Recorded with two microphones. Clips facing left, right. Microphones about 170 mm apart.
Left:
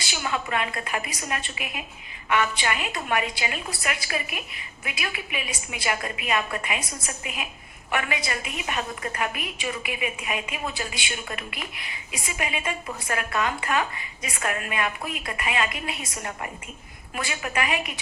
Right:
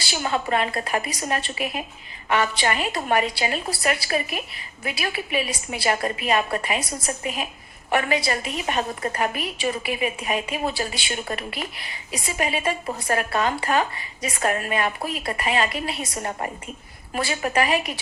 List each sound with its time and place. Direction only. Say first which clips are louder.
0.0 s a woman's voice: right 4 dB; 35° right (ahead or behind)